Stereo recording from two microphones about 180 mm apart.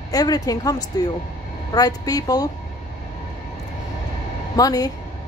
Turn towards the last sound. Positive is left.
turn(degrees=20)  # may be behind; listen again after turning